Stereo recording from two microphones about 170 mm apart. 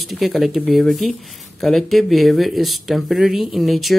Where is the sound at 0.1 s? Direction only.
Centre (ahead or behind).